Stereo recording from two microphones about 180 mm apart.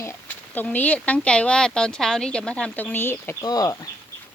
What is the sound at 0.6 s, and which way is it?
Speech, 10° left (ahead or behind).